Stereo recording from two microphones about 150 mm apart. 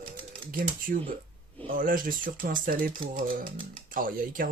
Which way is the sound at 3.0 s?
35° right (ahead or behind).